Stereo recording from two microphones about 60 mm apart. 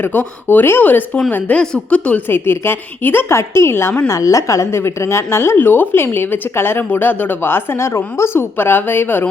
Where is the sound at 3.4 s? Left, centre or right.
Left.